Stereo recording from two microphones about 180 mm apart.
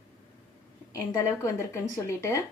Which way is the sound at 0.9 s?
15° left (ahead or behind).